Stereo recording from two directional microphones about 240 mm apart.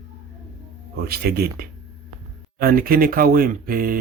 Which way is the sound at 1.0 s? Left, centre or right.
Right.